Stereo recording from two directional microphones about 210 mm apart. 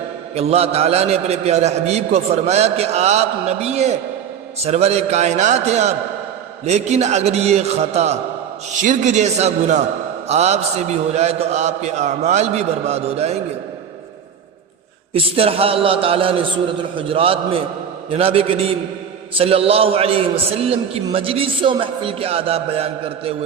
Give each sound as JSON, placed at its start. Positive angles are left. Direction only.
{"t": 0.3, "sound": "a man's voice", "side_deg": -30}
{"t": 15.1, "sound": "a man's voice", "side_deg": -25}